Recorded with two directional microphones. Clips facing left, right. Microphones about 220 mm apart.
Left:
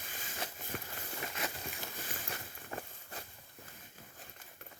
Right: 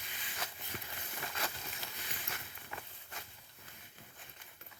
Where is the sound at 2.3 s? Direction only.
35° left (ahead or behind).